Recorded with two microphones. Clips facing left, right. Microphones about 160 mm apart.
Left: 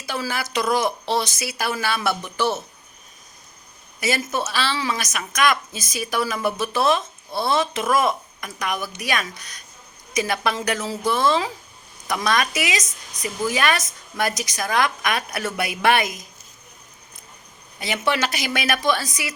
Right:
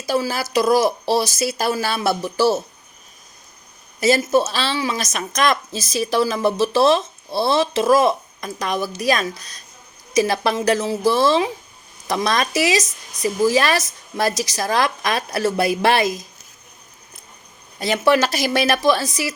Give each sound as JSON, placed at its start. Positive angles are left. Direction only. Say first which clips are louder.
{"t": 0.1, "sound": "a woman's voice", "louder": "right 6 dB", "side_deg": -30}
{"t": 4.1, "sound": "a woman's voice", "louder": "right 8 dB", "side_deg": -30}
{"t": 17.9, "sound": "a woman's voice", "louder": "right 6 dB", "side_deg": -35}